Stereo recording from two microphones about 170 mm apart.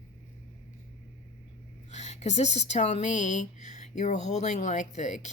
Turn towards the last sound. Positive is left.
turn(degrees=45)  # may be behind; listen again after turning